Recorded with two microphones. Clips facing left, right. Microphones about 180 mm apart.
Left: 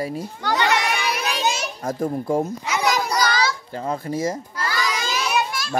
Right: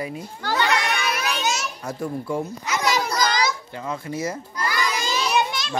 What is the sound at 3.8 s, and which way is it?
Speech, 35° left (ahead or behind).